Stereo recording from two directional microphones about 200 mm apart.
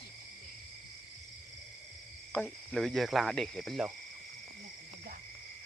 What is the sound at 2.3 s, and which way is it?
Speech, centre (ahead or behind).